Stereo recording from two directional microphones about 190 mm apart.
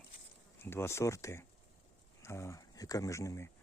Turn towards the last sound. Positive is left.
turn(degrees=15)  # may be behind; listen again after turning